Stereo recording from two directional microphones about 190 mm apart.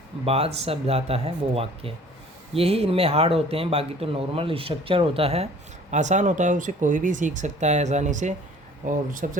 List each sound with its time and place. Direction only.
0.3 s speech: 30° right (ahead or behind)